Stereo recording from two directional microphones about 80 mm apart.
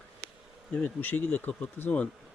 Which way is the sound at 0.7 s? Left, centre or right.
Centre.